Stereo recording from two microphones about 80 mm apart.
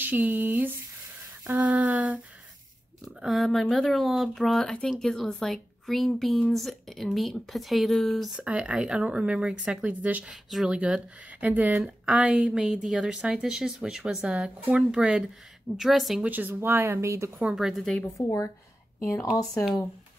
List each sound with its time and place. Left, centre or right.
0.0 s speech: right
3.1 s speech: centre
8.4 s speech: centre
10.3 s speech: centre
16.2 s speech: right
17.6 s speech: centre
18.2 s a woman's voice: left
18.9 s speech: left